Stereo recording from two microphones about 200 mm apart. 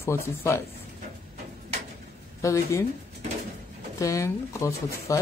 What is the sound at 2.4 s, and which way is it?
Speech, 15° left (ahead or behind).